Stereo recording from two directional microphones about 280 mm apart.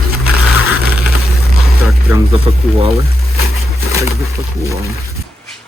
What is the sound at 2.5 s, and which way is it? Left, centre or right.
Speech, centre.